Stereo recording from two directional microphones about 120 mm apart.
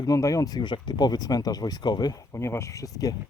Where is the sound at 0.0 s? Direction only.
25° left (ahead or behind).